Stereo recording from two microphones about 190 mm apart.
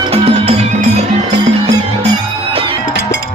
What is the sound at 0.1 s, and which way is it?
Music, 30° right (ahead or behind).